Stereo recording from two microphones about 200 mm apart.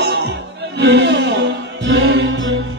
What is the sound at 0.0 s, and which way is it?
Music, 60° right (ahead or behind).